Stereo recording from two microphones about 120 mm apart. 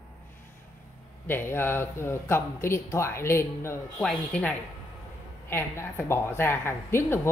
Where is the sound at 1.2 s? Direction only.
20° left (ahead or behind).